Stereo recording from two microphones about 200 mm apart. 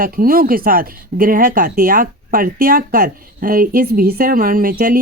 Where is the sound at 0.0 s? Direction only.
45° right (ahead or behind).